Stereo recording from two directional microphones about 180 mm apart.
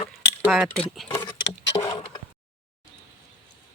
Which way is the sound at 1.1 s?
15° left (ahead or behind).